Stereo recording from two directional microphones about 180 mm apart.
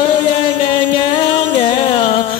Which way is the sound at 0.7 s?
30° left (ahead or behind).